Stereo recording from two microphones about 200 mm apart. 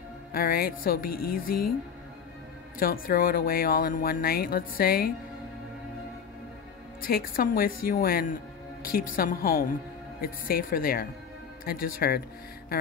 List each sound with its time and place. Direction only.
0.3 s speech: 45° left (ahead or behind)
2.8 s speech: 45° left (ahead or behind)
7.0 s speech: 50° left (ahead or behind)